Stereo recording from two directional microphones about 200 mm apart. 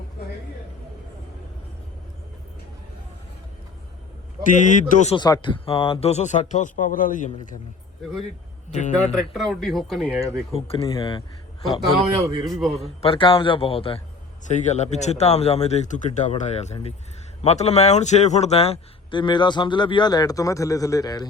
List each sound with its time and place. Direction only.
4.5 s speech: 40° left (ahead or behind)
5.1 s speech: 20° left (ahead or behind); by 7.3 s 40° left (ahead or behind)
8.7 s speech: 35° left (ahead or behind)
9.1 s speech: centre (ahead or behind)
10.2 s a man's voice: 30° left (ahead or behind)
12.5 s speech: centre (ahead or behind)
12.8 s a man's voice: 30° left (ahead or behind)